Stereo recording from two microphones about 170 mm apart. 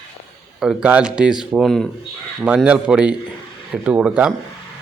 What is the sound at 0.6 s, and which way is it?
Speech, 5° right (ahead or behind).